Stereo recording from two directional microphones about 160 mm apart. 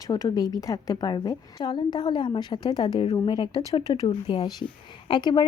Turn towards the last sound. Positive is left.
turn(degrees=30)  # may be behind; listen again after turning